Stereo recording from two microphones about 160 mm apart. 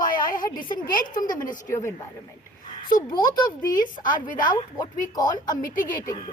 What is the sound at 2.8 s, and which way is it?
A woman's voice, 65° left (ahead or behind).